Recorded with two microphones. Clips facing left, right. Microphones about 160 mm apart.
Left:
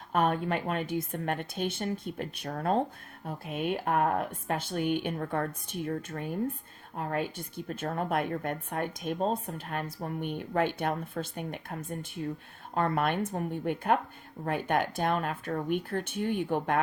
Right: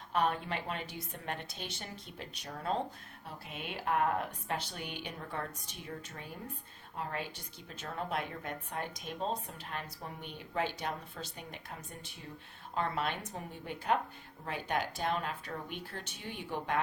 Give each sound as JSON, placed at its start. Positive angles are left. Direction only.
{"t": 0.1, "sound": "a woman's voice", "side_deg": 50}